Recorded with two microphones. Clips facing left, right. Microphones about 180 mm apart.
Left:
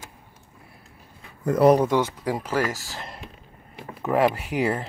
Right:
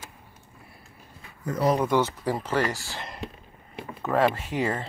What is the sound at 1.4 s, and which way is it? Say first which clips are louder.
Speech: left 8 dB; 60° left (ahead or behind).